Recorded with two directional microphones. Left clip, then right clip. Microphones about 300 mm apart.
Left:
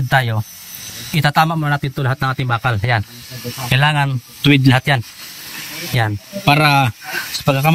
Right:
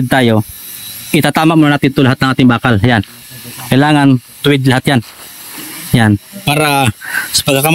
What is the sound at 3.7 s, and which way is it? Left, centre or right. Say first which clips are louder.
Speech: right 7 dB; right.